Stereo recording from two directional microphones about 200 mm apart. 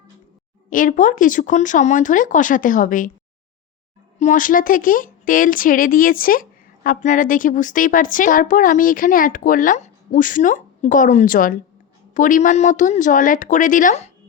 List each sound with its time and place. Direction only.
0.7 s speech: 40° left (ahead or behind)
4.2 s speech: 40° left (ahead or behind)